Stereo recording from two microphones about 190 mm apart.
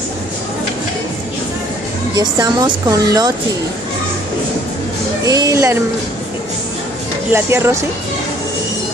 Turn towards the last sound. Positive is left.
turn(degrees=-15)  # may be behind; listen again after turning